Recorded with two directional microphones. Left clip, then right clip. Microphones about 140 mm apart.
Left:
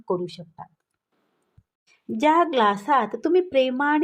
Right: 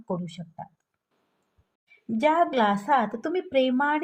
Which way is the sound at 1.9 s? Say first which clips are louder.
Left 3 dB; 40° left (ahead or behind).